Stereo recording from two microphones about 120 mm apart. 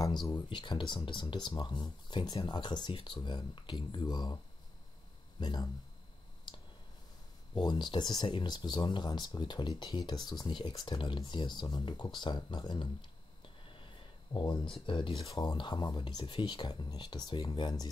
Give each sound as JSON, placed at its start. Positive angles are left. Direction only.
{"t": 0.0, "sound": "speech", "side_deg": 35}
{"t": 5.4, "sound": "speech", "side_deg": 35}
{"t": 7.5, "sound": "speech", "side_deg": 40}
{"t": 13.7, "sound": "a sound", "side_deg": 45}
{"t": 15.3, "sound": "speech", "side_deg": 40}